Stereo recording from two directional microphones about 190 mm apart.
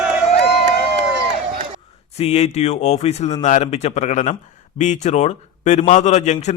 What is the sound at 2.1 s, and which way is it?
A man's voice, 35° left (ahead or behind).